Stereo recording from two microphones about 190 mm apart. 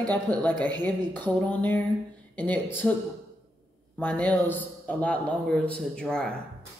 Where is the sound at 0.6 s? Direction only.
25° right (ahead or behind).